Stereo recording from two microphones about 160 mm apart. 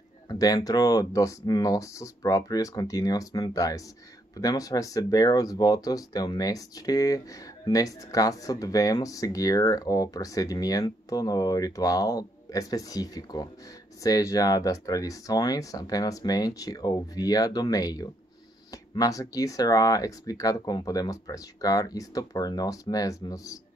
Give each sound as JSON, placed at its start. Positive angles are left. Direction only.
{"t": 0.3, "sound": "speech", "side_deg": 25}